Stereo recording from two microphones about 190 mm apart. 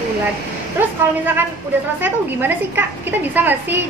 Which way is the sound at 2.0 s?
10° right (ahead or behind).